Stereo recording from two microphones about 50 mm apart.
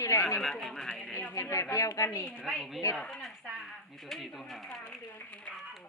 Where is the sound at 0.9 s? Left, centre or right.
Centre.